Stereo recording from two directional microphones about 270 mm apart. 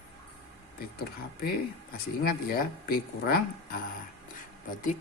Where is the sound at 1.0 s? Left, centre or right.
Left.